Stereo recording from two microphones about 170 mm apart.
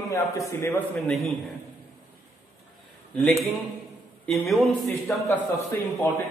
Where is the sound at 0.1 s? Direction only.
20° left (ahead or behind).